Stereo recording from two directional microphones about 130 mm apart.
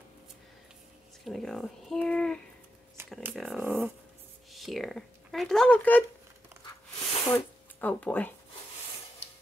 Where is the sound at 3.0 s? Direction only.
20° right (ahead or behind).